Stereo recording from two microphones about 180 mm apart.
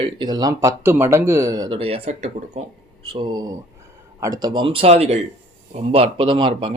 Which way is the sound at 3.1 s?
25° right (ahead or behind).